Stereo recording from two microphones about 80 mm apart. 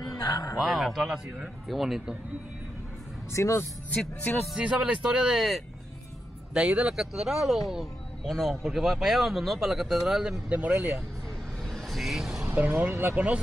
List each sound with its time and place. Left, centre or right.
0.2 s music: left
0.6 s speech: centre
3.3 s speech: left
4.6 s speech: centre
6.5 s speech: centre
10.5 s speech: centre
11.6 s vehicle: centre
12.4 s speech: right